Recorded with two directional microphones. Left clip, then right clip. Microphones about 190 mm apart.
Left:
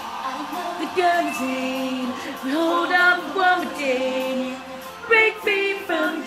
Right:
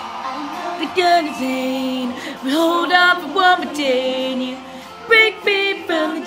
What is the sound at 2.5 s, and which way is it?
Music, 40° right (ahead or behind).